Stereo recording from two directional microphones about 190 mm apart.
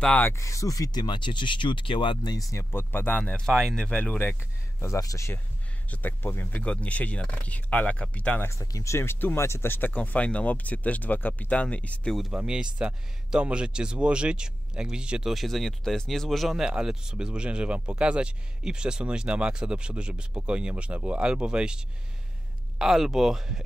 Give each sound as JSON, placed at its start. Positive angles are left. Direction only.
{"t": 0.0, "sound": "speech", "side_deg": 10}